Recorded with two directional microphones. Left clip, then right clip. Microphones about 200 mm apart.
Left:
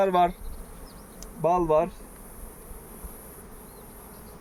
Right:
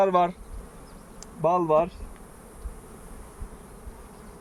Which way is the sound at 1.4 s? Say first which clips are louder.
Right 1 dB; 15° right (ahead or behind).